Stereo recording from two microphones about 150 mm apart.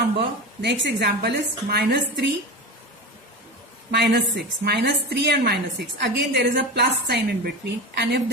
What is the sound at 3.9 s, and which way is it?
A woman's voice, 90° right.